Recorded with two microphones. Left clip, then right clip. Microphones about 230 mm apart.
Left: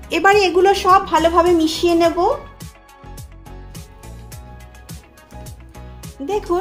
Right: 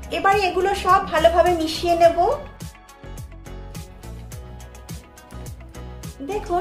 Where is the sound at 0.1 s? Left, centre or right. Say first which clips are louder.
Left 5 dB; left.